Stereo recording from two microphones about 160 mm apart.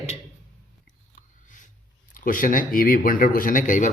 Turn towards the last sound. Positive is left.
turn(degrees=55)  # may be behind; listen again after turning